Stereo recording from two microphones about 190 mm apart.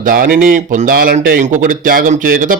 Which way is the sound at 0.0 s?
50° right (ahead or behind).